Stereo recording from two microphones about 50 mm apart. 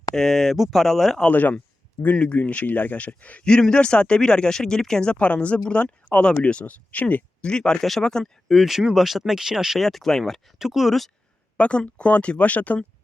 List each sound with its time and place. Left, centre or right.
0.1 s speech: centre
1.3 s speech: left
2.1 s speech: left
3.4 s speech: centre; by 7.3 s left
7.4 s speech: centre
7.8 s speech: centre
9.7 s speech: centre
10.6 s speech: centre
11.5 s speech: left